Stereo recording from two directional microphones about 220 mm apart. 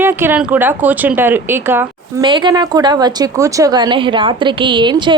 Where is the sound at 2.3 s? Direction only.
20° right (ahead or behind).